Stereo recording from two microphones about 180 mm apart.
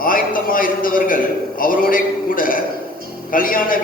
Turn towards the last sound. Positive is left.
turn(degrees=50)  # may be behind; listen again after turning